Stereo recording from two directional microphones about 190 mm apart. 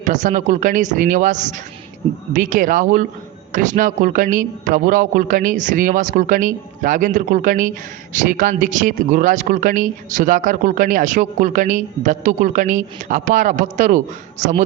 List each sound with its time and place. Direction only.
0.0 s speech: 40° right (ahead or behind)